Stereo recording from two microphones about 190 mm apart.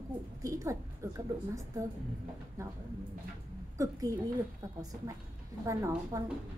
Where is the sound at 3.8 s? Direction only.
15° right (ahead or behind).